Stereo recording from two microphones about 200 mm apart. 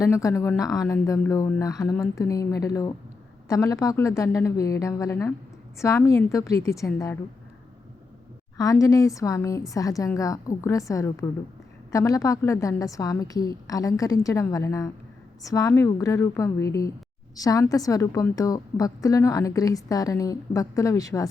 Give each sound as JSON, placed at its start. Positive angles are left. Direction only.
{"t": 0.0, "sound": "a woman's voice", "side_deg": 15}
{"t": 8.5, "sound": "a woman's voice", "side_deg": 15}